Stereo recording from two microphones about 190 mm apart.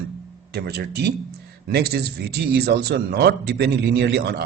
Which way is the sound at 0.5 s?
60° right (ahead or behind).